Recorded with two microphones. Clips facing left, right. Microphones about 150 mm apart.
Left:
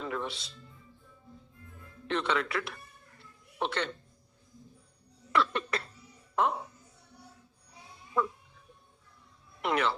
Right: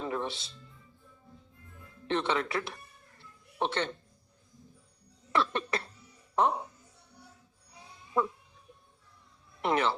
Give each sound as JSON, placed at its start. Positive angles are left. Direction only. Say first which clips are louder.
{"t": 0.0, "sound": "music", "louder": "right 2 dB", "side_deg": -30}
{"t": 2.0, "sound": "speech", "louder": "right 1 dB", "side_deg": -30}
{"t": 5.3, "sound": "cough", "louder": "even", "side_deg": -30}
{"t": 6.3, "sound": "speech", "louder": "right 2 dB", "side_deg": -25}
{"t": 9.6, "sound": "speech", "louder": "right 1 dB", "side_deg": -30}